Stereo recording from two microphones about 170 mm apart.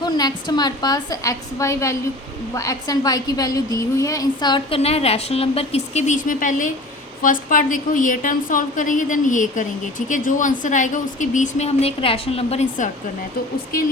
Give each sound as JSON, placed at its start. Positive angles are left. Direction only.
{"t": 0.0, "sound": "a woman's voice", "side_deg": 25}